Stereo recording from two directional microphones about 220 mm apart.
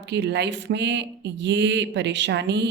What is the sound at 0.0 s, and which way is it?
Speech, 50° right (ahead or behind).